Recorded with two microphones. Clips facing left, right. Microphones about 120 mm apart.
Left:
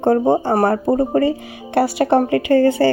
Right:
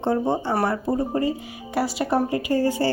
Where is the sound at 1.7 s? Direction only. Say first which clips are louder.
Left 7 dB; 65° left (ahead or behind).